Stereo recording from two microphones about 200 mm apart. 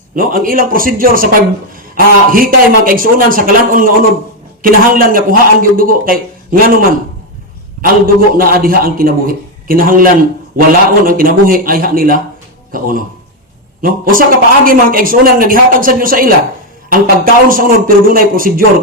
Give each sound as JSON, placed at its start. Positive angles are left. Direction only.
{"t": 0.2, "sound": "speech", "side_deg": -45}
{"t": 7.8, "sound": "speech", "side_deg": -45}